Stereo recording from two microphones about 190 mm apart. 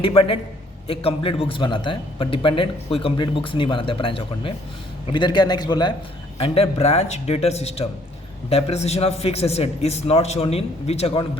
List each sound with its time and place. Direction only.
0.0 s a man's voice: 30° left (ahead or behind)